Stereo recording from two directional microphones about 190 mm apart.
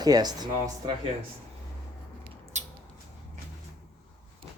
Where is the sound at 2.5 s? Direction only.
40° right (ahead or behind).